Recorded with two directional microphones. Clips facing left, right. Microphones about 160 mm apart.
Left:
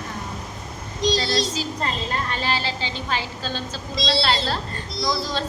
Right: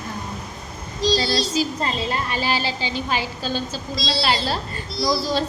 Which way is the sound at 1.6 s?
10° right (ahead or behind).